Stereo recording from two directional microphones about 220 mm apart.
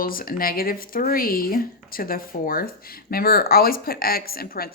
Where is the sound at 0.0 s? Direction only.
40° left (ahead or behind).